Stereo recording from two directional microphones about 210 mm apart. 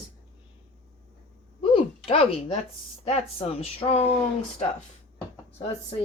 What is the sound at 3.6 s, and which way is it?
Speech, 30° left (ahead or behind).